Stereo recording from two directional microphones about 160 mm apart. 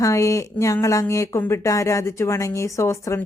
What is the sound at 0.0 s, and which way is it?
Speech, 20° left (ahead or behind).